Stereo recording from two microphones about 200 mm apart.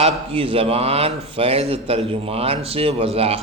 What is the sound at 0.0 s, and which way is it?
A man's voice, 25° right (ahead or behind).